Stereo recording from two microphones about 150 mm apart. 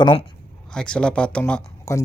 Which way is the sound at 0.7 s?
5° left (ahead or behind).